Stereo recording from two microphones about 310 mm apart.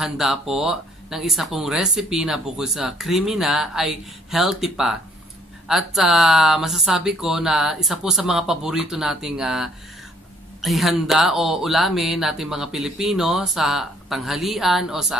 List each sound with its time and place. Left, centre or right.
0.0 s speech: centre